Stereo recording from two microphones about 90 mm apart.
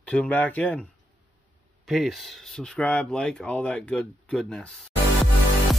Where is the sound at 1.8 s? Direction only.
5° right (ahead or behind).